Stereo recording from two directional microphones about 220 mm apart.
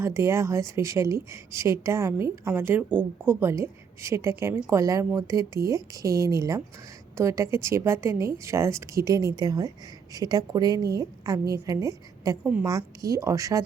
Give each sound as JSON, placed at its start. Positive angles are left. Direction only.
{"t": 0.0, "sound": "speech", "side_deg": -10}